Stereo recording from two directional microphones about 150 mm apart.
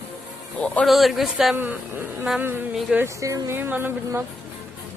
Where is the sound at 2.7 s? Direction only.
Centre (ahead or behind).